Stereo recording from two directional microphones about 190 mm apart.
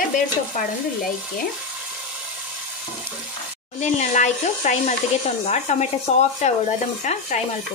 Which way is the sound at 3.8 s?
40° left (ahead or behind).